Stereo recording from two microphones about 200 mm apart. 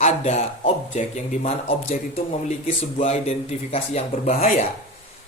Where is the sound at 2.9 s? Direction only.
30° left (ahead or behind).